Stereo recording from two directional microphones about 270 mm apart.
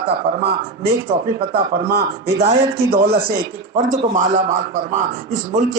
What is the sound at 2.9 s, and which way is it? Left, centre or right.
Speech, right.